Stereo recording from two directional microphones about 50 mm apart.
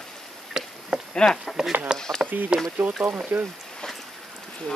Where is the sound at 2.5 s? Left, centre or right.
Centre.